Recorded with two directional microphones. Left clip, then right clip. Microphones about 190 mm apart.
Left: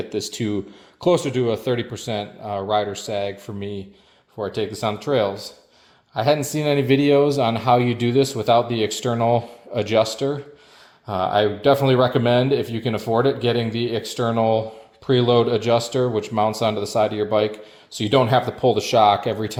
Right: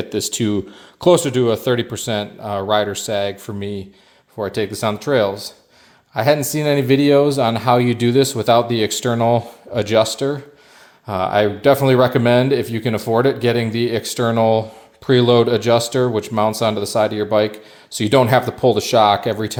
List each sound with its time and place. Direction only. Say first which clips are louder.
0.0 s speech: right 5 dB; 30° right (ahead or behind)